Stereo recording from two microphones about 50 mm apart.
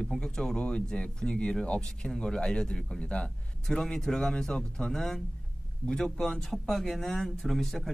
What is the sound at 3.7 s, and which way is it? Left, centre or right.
Speech, centre.